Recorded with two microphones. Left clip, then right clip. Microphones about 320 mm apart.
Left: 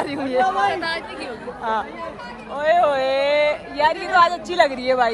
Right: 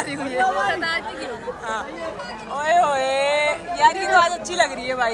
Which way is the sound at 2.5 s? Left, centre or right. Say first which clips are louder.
Left 1 dB; centre.